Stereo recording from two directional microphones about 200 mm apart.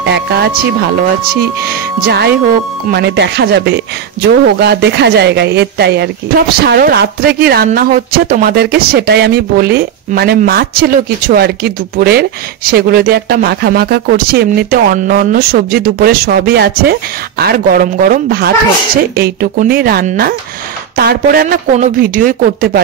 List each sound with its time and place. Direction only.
0.0 s a woman's voice: 55° right (ahead or behind)